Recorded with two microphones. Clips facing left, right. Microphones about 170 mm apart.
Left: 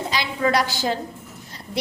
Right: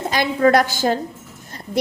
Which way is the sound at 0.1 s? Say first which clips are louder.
Right 7 dB; 50° right (ahead or behind).